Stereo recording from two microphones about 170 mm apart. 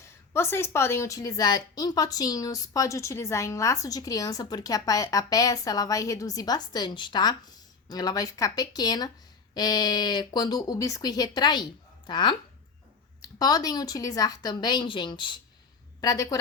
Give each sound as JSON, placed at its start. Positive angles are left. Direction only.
{"t": 0.0, "sound": "a woman's voice", "side_deg": 15}